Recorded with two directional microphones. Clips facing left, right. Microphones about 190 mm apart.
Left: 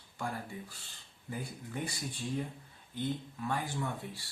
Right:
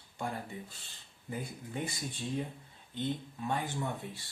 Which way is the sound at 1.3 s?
20° right (ahead or behind).